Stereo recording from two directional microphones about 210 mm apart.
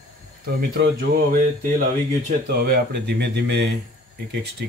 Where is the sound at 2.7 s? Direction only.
55° right (ahead or behind).